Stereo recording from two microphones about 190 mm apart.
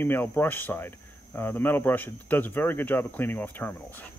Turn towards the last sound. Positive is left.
turn(degrees=10)  # may be behind; listen again after turning